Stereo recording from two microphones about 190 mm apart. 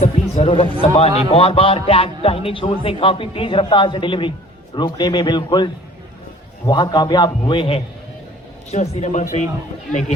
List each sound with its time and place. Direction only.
0.0 s a man's voice: 35° left (ahead or behind)
6.7 s a man's voice: 20° left (ahead or behind); by 9.5 s 40° left (ahead or behind)